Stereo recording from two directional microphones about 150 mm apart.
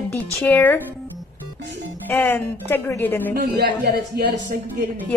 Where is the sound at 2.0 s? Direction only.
10° left (ahead or behind).